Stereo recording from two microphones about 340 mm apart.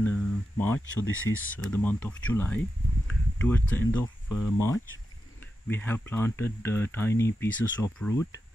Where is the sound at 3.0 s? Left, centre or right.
Centre.